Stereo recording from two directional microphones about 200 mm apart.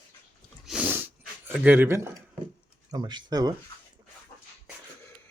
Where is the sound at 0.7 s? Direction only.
5° right (ahead or behind).